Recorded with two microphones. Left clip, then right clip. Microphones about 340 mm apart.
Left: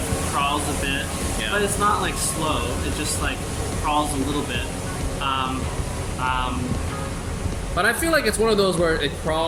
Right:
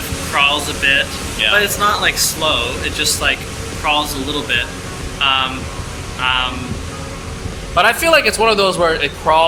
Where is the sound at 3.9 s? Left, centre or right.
Centre.